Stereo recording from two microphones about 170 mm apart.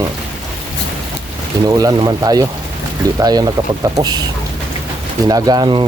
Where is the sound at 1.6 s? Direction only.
25° right (ahead or behind).